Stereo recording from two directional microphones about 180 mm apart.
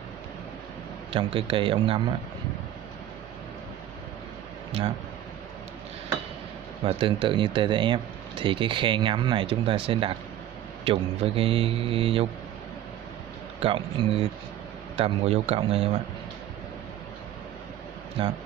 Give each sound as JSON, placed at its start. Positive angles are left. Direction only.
{"t": 1.1, "sound": "speech", "side_deg": -30}
{"t": 6.8, "sound": "speech", "side_deg": -30}
{"t": 13.6, "sound": "speech", "side_deg": -30}